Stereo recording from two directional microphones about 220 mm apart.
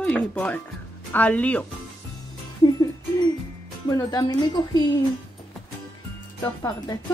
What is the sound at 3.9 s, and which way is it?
Speech, 15° left (ahead or behind).